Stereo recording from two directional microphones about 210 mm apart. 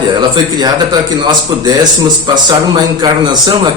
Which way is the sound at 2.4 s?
20° right (ahead or behind).